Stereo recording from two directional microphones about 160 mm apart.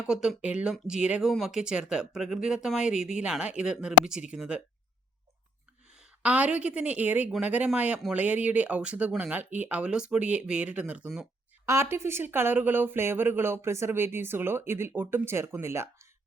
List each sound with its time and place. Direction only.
0.0 s speech: 5° right (ahead or behind)
6.0 s speech: 10° right (ahead or behind)
11.6 s speech: 15° right (ahead or behind)